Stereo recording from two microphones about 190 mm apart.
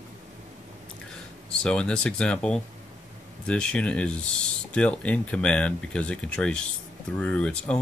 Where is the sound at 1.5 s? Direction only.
5° left (ahead or behind).